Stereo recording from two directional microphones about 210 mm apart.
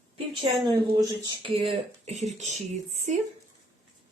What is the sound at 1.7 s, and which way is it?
Speech, 30° right (ahead or behind).